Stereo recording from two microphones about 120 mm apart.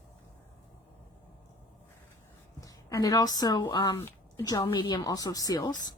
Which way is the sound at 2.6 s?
30° left (ahead or behind).